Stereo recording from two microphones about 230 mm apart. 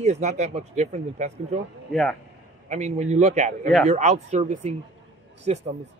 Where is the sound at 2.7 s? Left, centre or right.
Right.